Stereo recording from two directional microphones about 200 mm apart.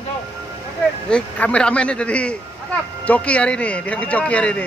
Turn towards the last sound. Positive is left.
turn(degrees=5)  # may be behind; listen again after turning